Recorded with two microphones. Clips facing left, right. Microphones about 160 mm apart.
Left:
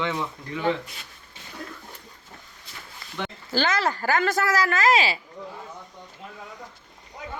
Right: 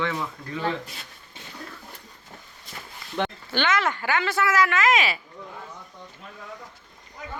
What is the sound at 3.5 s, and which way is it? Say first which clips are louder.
Speech: left 2 dB; 35° left (ahead or behind).